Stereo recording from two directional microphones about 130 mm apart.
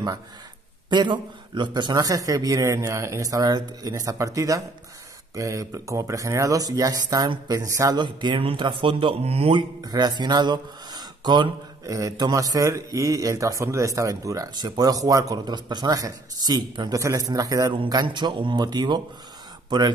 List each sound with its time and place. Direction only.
0.8 s a man's voice: 35° right (ahead or behind)
8.0 s speech: 35° right (ahead or behind)
11.8 s a man's voice: 25° right (ahead or behind)